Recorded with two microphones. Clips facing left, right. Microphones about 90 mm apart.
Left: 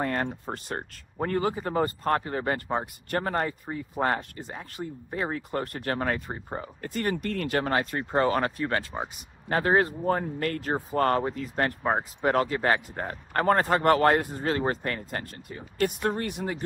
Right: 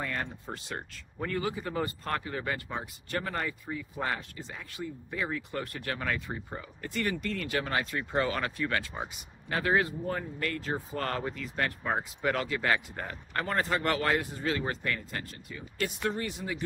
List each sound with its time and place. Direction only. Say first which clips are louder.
0.0 s speech: left 7 dB; 40° left (ahead or behind); by 16.5 s 55° left (ahead or behind)